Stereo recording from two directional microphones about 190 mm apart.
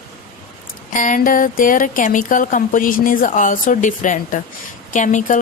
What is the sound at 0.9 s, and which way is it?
Speech, 45° left (ahead or behind).